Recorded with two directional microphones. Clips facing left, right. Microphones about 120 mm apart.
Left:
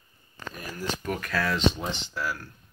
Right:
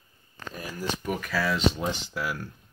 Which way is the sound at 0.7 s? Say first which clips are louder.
Right 1 dB; 10° right (ahead or behind).